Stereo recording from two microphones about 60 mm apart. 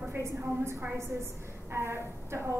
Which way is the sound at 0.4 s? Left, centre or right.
Right.